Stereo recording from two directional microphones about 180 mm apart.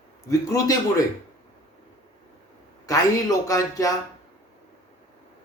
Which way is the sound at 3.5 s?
20° left (ahead or behind).